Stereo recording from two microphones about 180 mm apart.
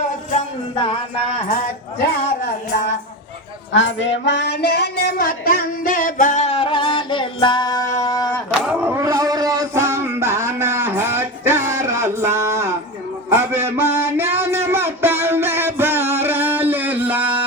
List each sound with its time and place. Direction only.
3.7 s speech: 90° left
4.2 s music: 70° left (ahead or behind); by 8.3 s 20° left (ahead or behind)
8.6 s a sound: 10° right (ahead or behind)